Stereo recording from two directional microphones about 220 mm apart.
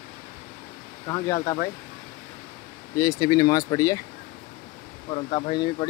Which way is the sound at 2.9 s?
15° left (ahead or behind).